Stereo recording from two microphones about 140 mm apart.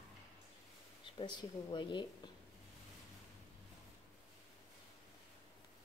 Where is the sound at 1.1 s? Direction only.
35° left (ahead or behind).